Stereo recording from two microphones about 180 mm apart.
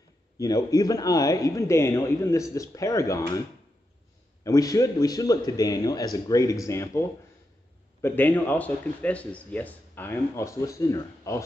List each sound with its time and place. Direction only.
0.4 s speech: 20° left (ahead or behind)
4.5 s a man's voice: 20° left (ahead or behind)